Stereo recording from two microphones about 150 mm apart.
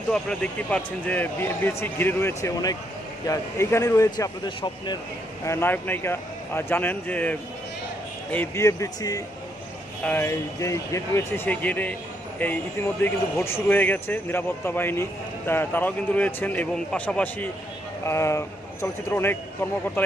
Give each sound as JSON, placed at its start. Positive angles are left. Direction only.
{"t": 0.1, "sound": "speech", "side_deg": 5}
{"t": 5.5, "sound": "speech", "side_deg": 15}
{"t": 10.0, "sound": "speech", "side_deg": 15}
{"t": 18.0, "sound": "speech", "side_deg": 20}